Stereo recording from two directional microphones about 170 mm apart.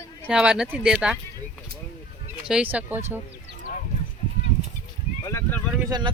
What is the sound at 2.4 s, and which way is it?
Speech, 5° right (ahead or behind).